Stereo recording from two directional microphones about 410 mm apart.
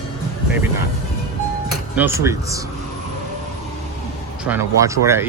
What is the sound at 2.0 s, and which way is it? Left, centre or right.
Speech, centre.